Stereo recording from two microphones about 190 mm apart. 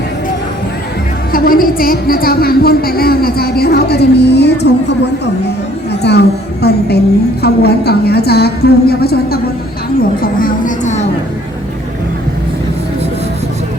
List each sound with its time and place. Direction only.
1.3 s a woman's voice: 50° left (ahead or behind)